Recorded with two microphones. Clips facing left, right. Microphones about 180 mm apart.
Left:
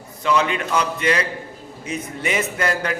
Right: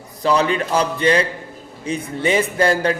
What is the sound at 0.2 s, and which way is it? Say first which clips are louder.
A man's voice: right 3 dB; 35° right (ahead or behind).